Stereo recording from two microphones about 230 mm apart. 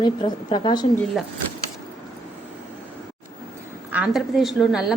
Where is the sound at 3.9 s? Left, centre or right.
Centre.